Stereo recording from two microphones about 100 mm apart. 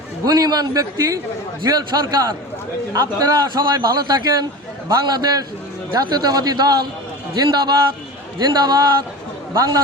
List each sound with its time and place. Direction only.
0.3 s a man's voice: 40° right (ahead or behind)